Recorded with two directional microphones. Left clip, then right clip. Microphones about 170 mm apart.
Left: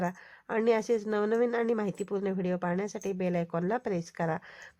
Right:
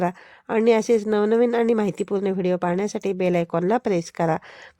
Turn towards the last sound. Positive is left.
turn(degrees=-45)  # may be behind; listen again after turning